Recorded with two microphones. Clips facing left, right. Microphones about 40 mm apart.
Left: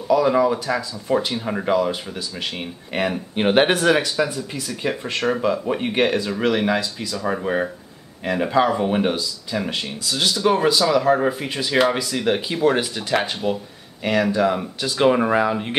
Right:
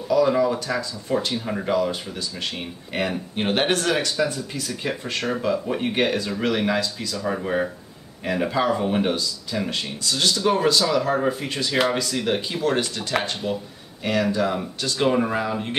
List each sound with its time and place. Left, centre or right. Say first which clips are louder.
0.1 s speech: left 2 dB; centre